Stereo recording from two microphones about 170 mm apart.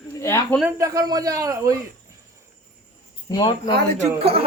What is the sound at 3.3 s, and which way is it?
Speech, 25° left (ahead or behind).